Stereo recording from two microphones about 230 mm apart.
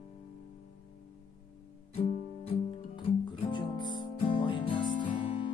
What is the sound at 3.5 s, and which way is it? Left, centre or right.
Music, centre.